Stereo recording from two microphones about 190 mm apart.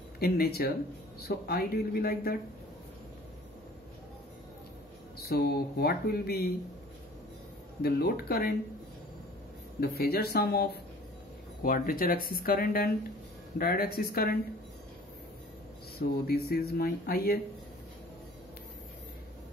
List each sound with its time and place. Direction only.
0.2 s speech: 55° left (ahead or behind)
5.2 s speech: 55° left (ahead or behind)
7.8 s speech: 55° left (ahead or behind)
9.8 s speech: 55° left (ahead or behind)
16.0 s speech: 55° left (ahead or behind)